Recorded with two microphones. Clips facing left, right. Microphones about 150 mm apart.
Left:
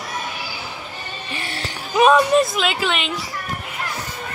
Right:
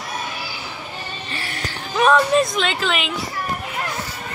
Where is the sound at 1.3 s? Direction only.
20° left (ahead or behind).